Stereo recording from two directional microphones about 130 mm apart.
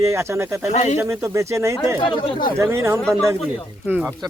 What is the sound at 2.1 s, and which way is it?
Speech, 40° left (ahead or behind).